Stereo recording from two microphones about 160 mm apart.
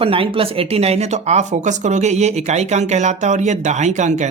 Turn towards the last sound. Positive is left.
turn(degrees=-50)  # may be behind; listen again after turning